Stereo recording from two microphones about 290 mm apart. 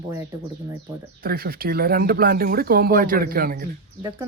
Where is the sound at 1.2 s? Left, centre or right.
Right.